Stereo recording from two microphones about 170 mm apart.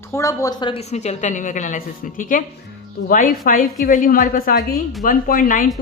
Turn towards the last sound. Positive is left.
turn(degrees=50)  # may be behind; listen again after turning